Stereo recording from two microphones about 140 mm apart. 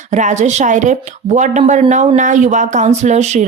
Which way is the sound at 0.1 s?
60° right (ahead or behind).